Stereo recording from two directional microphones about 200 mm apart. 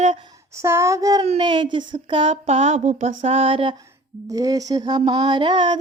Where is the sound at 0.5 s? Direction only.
15° right (ahead or behind).